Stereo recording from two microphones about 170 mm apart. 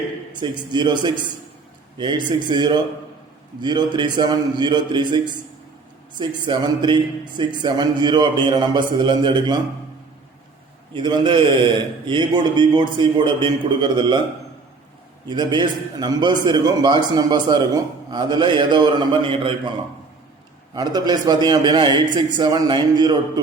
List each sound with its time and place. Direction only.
0.3 s a man's voice: 25° right (ahead or behind)
10.9 s a man's voice: 25° right (ahead or behind)
15.3 s a man's voice: 25° right (ahead or behind)
20.7 s a man's voice: 25° right (ahead or behind)